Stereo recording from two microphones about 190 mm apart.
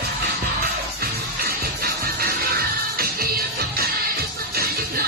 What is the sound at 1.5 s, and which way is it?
Music, 55° right (ahead or behind).